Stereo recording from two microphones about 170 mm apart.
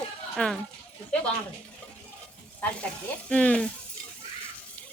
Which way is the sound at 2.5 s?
5° left (ahead or behind).